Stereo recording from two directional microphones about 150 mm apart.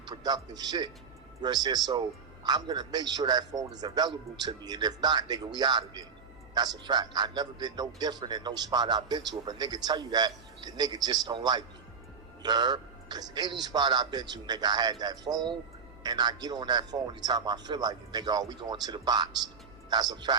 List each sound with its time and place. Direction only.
0.1 s a man's voice: 25° right (ahead or behind)